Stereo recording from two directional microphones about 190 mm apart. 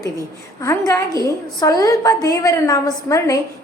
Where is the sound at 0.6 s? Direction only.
15° left (ahead or behind).